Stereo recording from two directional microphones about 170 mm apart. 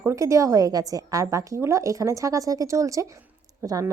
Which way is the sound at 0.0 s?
15° right (ahead or behind).